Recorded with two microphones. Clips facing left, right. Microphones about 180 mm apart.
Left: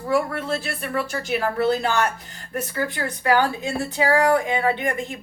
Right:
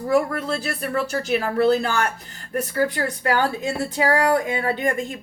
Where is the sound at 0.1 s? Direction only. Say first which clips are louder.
Right 2 dB; 40° right (ahead or behind).